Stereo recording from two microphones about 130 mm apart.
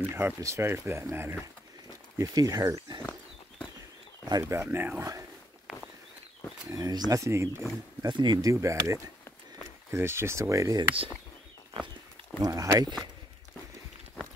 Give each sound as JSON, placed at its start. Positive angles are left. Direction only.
{"t": 0.0, "sound": "speech", "side_deg": -20}
{"t": 3.0, "sound": "pig", "side_deg": 10}
{"t": 4.3, "sound": "speech", "side_deg": -25}
{"t": 6.7, "sound": "speech", "side_deg": -25}
{"t": 8.0, "sound": "speech", "side_deg": -35}
{"t": 12.4, "sound": "speech", "side_deg": -25}